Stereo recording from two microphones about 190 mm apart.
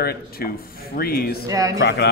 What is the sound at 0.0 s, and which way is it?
A man's voice, 55° left (ahead or behind).